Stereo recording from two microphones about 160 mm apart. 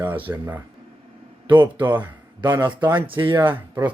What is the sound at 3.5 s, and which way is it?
Speech, 15° right (ahead or behind).